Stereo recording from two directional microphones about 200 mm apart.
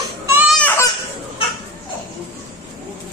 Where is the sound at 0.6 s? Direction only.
10° left (ahead or behind).